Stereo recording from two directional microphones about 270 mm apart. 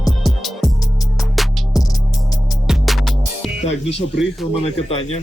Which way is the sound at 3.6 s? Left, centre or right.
Left.